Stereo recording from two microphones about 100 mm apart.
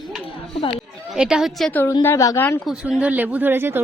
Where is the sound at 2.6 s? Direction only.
5° right (ahead or behind); by 3.8 s 20° right (ahead or behind).